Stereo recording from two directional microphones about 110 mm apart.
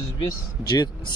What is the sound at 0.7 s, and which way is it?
Speech, 40° left (ahead or behind).